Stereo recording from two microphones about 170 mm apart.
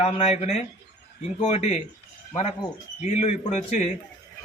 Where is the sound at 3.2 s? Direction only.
40° left (ahead or behind).